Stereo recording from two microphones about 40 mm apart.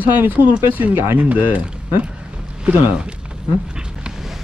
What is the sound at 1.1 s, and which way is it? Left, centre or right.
Speech, right.